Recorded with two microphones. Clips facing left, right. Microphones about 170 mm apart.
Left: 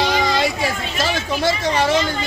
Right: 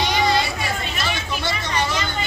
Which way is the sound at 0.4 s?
90° left.